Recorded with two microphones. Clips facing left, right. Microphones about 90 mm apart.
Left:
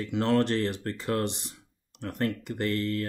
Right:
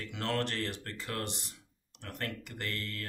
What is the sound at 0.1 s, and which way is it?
Speech, 25° left (ahead or behind).